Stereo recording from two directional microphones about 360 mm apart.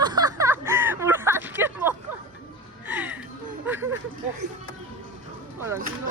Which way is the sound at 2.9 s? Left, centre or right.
Centre.